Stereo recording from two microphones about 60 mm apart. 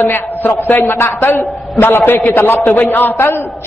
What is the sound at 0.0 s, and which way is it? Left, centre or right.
A man's voice, left.